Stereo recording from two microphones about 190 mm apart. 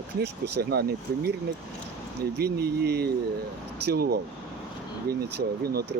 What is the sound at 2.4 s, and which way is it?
Speech, 55° right (ahead or behind).